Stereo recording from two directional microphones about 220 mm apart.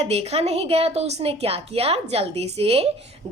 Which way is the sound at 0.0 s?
30° right (ahead or behind).